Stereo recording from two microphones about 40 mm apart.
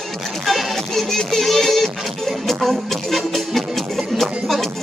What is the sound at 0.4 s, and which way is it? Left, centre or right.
Music, centre.